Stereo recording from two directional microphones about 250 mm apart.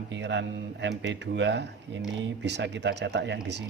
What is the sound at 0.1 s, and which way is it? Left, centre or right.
Speech, right.